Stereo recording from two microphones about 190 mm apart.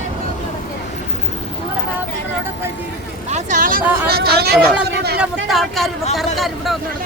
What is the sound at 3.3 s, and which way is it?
Speech, 40° right (ahead or behind).